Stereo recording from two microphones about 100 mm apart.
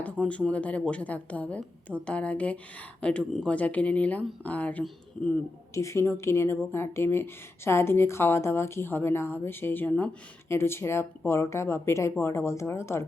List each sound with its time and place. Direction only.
0.0 s speech: 15° left (ahead or behind)
5.7 s a woman's voice: 30° left (ahead or behind)
9.9 s speech: 10° left (ahead or behind)
10.5 s a woman's voice: 25° left (ahead or behind)